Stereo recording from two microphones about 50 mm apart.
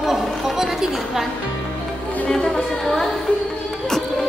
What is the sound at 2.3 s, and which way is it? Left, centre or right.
Music, centre.